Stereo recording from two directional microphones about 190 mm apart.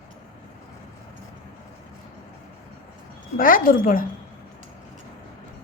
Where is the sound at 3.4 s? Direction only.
45° left (ahead or behind).